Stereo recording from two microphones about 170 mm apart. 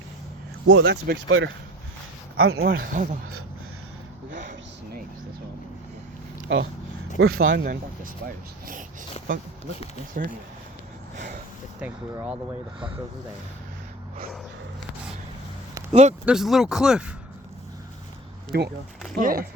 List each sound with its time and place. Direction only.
0.9 s speech: 75° right (ahead or behind)
2.3 s speech: 65° right (ahead or behind)
4.3 s a sound: 50° right (ahead or behind)
6.5 s speech: 90° right
7.2 s speech: 80° right; by 8.1 s 60° right (ahead or behind)
9.2 s a sound: 40° left (ahead or behind)
10.2 s speech: 50° right (ahead or behind)
12.1 s speech: 10° right (ahead or behind)
15.9 s speech: 45° right (ahead or behind)
16.2 s speech: 5° right (ahead or behind)
18.5 s speech: 70° right (ahead or behind)
19.1 s speech: 60° right (ahead or behind)